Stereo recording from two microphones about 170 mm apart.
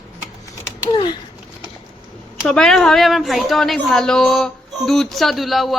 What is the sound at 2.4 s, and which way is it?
A woman's voice, 5° left (ahead or behind).